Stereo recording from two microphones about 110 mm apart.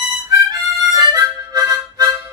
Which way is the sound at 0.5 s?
35° right (ahead or behind).